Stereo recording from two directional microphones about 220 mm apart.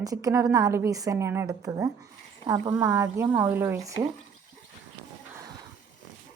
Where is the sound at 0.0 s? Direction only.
15° right (ahead or behind).